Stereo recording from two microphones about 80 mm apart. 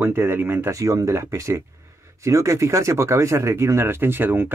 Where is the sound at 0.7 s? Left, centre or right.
Right.